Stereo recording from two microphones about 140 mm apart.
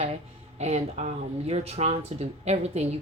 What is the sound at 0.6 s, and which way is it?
A woman's voice, 55° right (ahead or behind).